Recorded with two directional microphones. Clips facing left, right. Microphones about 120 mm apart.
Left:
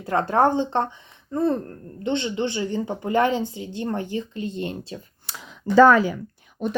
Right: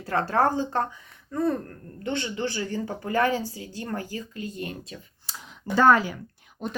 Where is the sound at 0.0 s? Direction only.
20° left (ahead or behind).